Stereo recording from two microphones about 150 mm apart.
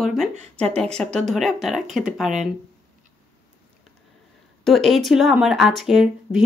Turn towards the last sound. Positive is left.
turn(degrees=-5)  # may be behind; listen again after turning